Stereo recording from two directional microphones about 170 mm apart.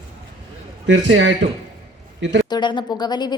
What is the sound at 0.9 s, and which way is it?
Speech, 90° right.